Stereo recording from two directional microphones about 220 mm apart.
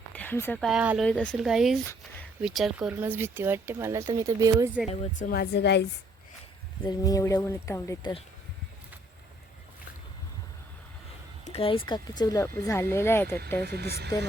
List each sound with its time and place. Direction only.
0.1 s speech: 10° left (ahead or behind); by 4.8 s 15° right (ahead or behind)
4.9 s speech: 40° left (ahead or behind)
6.8 s speech: 15° left (ahead or behind)
11.4 s speech: 25° left (ahead or behind)
13.7 s speech: 45° right (ahead or behind)